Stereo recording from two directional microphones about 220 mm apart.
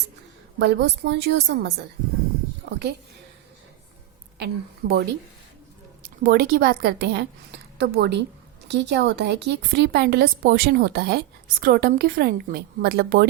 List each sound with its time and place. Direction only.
0.6 s a woman's voice: 50° right (ahead or behind)
2.6 s speech: 50° right (ahead or behind)
4.4 s a woman's voice: 45° right (ahead or behind)